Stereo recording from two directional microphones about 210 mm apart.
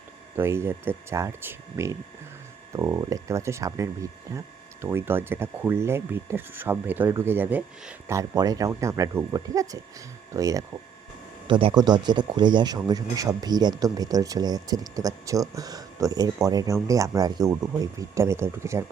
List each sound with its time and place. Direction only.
0.3 s speech: 10° right (ahead or behind)